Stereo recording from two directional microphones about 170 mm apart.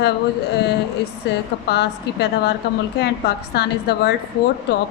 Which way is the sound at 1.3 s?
80° left.